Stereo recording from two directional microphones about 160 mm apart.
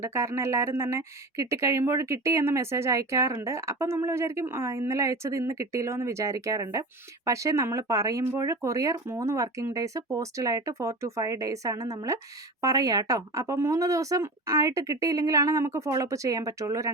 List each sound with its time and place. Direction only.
0.0 s speech: 15° right (ahead or behind)